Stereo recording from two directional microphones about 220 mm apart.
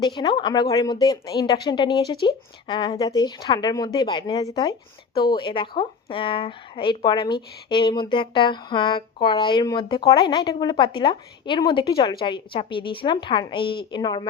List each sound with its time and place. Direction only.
0.0 s speech: 20° left (ahead or behind)